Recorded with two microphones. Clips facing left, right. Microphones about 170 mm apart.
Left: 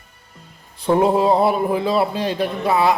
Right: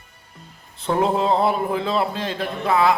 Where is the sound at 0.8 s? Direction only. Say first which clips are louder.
Left 4 dB; 10° left (ahead or behind).